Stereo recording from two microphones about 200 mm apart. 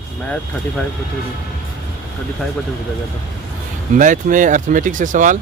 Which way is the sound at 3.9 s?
40° right (ahead or behind).